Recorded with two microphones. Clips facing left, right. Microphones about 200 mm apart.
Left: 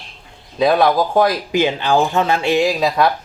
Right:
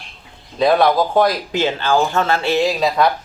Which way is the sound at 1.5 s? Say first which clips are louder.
Left 3 dB; 15° left (ahead or behind).